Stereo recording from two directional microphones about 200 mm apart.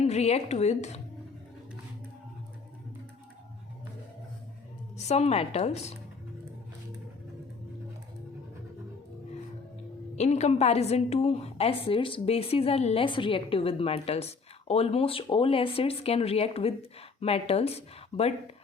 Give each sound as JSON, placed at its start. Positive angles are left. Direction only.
{"t": 0.0, "sound": "speech", "side_deg": 35}
{"t": 4.9, "sound": "speech", "side_deg": 35}
{"t": 10.2, "sound": "a woman's voice", "side_deg": 35}